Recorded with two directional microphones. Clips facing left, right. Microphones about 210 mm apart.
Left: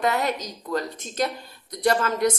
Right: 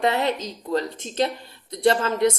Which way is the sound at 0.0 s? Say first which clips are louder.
Right 2 dB; 25° right (ahead or behind).